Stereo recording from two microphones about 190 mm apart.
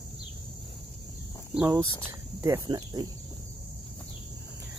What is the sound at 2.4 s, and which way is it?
Cricket, 15° right (ahead or behind).